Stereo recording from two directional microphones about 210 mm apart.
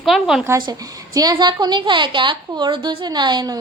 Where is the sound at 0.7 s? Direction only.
15° right (ahead or behind).